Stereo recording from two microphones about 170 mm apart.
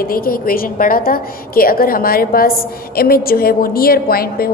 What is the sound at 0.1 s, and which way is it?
A woman's voice, 60° left (ahead or behind).